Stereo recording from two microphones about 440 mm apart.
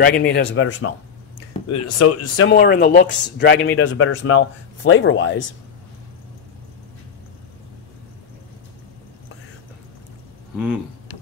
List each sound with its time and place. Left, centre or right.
0.0 s a man's voice: left
2.5 s a man's voice: left